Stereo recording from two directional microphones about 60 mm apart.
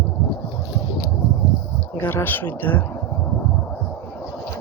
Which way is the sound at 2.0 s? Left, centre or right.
Left.